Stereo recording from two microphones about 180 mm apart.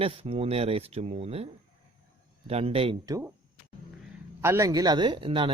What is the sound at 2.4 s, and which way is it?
Speech, 35° right (ahead or behind).